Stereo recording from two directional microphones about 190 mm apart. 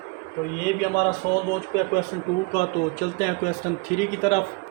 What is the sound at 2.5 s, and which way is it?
A man's voice, 45° left (ahead or behind).